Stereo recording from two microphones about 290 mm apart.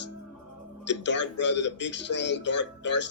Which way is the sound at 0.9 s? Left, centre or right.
Left.